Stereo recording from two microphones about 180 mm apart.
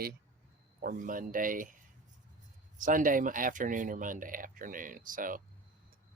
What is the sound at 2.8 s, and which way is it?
Speech, 50° right (ahead or behind).